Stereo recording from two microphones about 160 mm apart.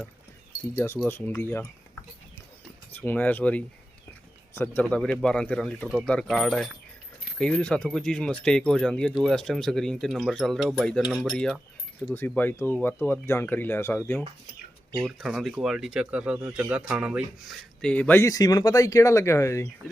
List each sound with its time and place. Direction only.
0.7 s speech: 15° left (ahead or behind)
2.9 s speech: 10° left (ahead or behind)
12.0 s speech: 10° left (ahead or behind)
15.0 s speech: centre (ahead or behind)
17.7 s speech: 5° left (ahead or behind)